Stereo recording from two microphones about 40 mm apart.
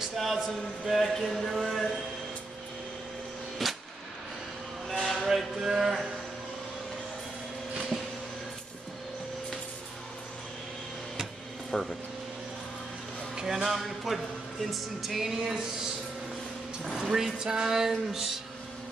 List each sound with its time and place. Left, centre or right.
0.2 s speech: centre
3.6 s artillery fire: centre
4.8 s music: centre
11.7 s speech: left
13.3 s a sound: centre
13.7 s speech: centre
16.9 s speech: centre